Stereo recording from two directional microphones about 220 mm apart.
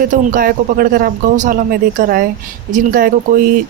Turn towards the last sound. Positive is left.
turn(degrees=-40)  # may be behind; listen again after turning